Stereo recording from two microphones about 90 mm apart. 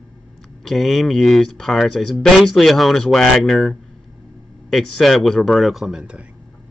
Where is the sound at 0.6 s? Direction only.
Centre (ahead or behind).